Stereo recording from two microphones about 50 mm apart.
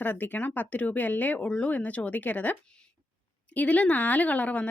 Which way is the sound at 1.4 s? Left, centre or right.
Left.